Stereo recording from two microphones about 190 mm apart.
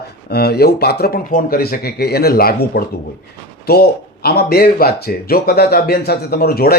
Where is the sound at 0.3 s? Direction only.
55° left (ahead or behind).